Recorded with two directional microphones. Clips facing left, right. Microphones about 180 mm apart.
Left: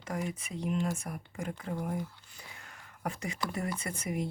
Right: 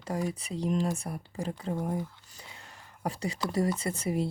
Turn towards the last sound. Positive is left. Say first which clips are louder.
# right 5 dB
turn(degrees=-30)  # may be behind; listen again after turning